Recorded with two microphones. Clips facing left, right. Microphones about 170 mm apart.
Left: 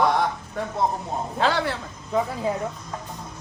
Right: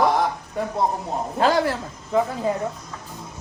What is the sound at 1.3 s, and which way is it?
Speech, 40° right (ahead or behind).